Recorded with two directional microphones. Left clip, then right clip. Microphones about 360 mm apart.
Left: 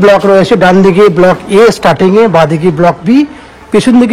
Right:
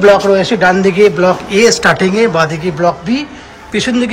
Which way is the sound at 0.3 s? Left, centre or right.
Centre.